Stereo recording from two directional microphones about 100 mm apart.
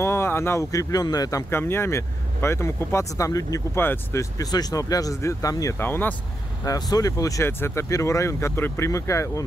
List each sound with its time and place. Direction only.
0.0 s speech: 25° left (ahead or behind)
1.5 s speech: 25° left (ahead or behind)
3.7 s speech: 20° left (ahead or behind)
5.8 s speech: 20° left (ahead or behind)
6.6 s speech: 35° left (ahead or behind)